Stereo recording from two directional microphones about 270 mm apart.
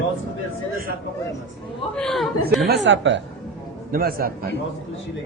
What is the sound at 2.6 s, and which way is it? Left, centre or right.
A woman's voice, right.